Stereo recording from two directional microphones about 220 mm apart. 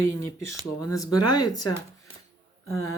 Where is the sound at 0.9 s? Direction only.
15° left (ahead or behind).